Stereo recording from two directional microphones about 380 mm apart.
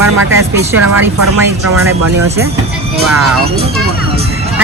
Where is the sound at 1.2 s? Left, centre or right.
Right.